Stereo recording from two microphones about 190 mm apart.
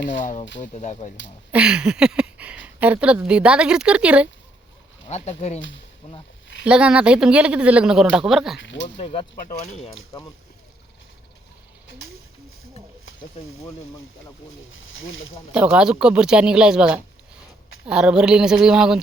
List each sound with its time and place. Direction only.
0.2 s speech: 40° left (ahead or behind)
1.5 s a woman's voice: 5° right (ahead or behind)
5.0 s speech: 35° left (ahead or behind)
5.5 s speech: 75° left (ahead or behind)
6.0 s a sound: 30° left (ahead or behind)
6.7 s speech: 5° right (ahead or behind)
8.5 s speech: 70° left (ahead or behind)
9.0 s speech: 30° left (ahead or behind)
13.7 s speech: 15° left (ahead or behind)
14.7 s speech: 90° left
15.5 s speech: 5° right (ahead or behind)